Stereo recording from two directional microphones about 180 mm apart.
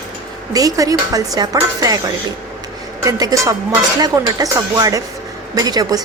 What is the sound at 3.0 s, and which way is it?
A woman's voice, 20° right (ahead or behind).